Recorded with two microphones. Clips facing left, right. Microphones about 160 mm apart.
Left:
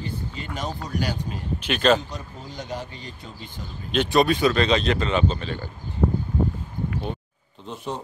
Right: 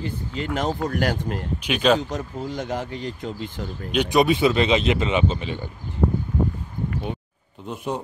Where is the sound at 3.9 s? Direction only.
15° right (ahead or behind).